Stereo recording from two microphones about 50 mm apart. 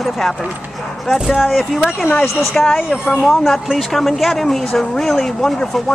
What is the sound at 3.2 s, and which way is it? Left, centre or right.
Speech, centre.